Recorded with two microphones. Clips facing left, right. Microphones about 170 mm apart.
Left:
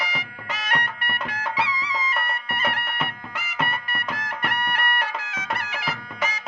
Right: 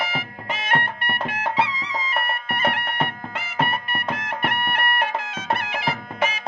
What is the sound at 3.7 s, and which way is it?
Music, 60° right (ahead or behind).